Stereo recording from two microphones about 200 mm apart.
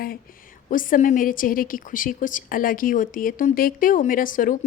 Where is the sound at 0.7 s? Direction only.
40° left (ahead or behind).